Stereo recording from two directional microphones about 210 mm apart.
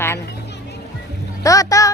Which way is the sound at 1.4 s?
15° left (ahead or behind).